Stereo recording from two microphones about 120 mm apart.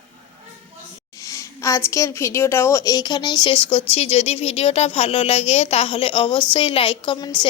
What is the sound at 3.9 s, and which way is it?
A woman's voice, 60° left (ahead or behind).